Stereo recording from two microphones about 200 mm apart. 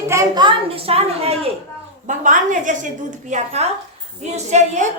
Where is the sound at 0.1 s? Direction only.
20° right (ahead or behind).